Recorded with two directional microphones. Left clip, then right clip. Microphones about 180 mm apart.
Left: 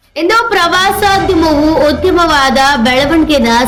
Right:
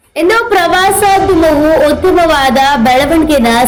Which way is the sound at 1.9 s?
Centre (ahead or behind).